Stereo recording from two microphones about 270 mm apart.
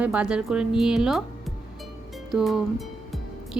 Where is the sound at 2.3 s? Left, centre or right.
Centre.